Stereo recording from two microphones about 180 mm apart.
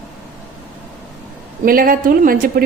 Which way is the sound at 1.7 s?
55° right (ahead or behind).